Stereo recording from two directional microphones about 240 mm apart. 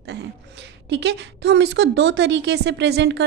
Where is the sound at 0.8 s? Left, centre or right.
Right.